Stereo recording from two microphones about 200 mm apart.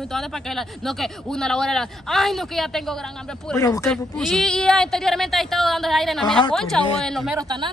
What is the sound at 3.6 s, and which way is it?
Speech, 15° left (ahead or behind).